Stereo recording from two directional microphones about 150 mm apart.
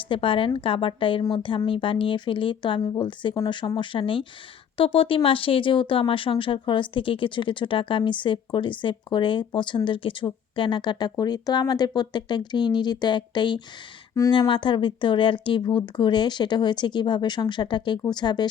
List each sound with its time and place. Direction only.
0.1 s speech: 35° left (ahead or behind)